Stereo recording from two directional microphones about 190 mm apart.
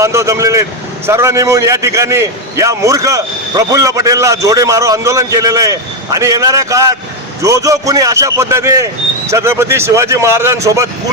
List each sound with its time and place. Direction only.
0.0 s a man's voice: 15° right (ahead or behind)